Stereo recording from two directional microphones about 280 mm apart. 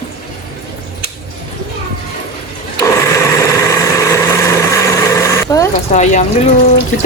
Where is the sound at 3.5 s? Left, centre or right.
Centre.